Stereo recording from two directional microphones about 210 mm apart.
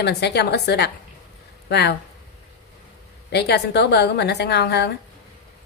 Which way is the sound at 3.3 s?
50° left (ahead or behind).